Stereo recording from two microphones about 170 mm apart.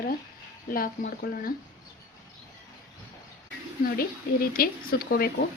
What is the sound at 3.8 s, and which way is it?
Speech, 60° left (ahead or behind).